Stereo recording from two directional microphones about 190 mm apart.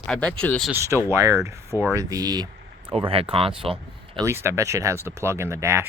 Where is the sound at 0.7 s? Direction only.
15° right (ahead or behind).